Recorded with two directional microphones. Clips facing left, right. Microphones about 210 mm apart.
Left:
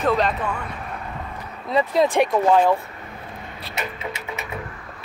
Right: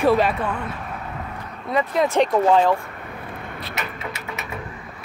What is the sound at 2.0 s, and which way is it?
Speech, 15° left (ahead or behind).